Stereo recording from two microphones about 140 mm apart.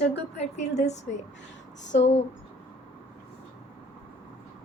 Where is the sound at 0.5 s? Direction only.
55° left (ahead or behind).